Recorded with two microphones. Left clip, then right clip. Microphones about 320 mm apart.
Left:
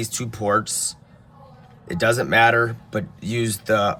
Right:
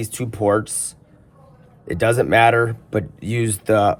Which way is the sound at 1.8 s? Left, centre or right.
Centre.